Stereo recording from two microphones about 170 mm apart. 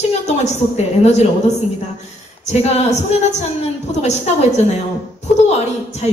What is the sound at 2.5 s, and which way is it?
A woman's voice, 40° left (ahead or behind).